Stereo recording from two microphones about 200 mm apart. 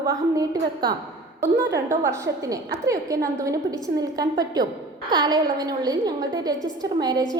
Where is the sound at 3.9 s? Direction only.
20° right (ahead or behind).